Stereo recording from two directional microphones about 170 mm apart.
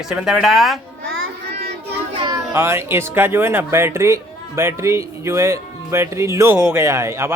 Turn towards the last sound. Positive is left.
turn(degrees=-15)  # may be behind; listen again after turning